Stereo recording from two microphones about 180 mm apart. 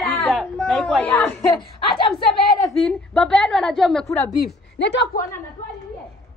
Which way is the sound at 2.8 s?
5° left (ahead or behind).